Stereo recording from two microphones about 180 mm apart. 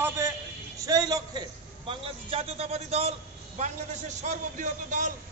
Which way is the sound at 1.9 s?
30° right (ahead or behind).